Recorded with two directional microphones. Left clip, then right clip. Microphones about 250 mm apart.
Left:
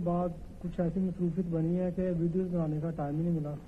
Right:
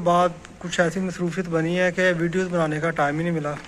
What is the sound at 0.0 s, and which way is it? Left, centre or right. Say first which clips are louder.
A man's voice: right 14 dB; right.